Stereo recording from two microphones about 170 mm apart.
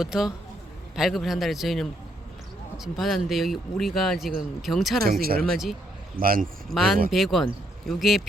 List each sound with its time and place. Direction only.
0.0 s speech: 5° right (ahead or behind)
6.1 s a man's voice: 60° right (ahead or behind)
6.7 s speech: centre (ahead or behind)